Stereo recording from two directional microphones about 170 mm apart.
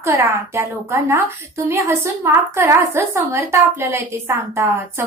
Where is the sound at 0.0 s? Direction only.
15° right (ahead or behind).